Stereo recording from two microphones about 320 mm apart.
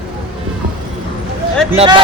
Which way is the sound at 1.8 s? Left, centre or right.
Centre.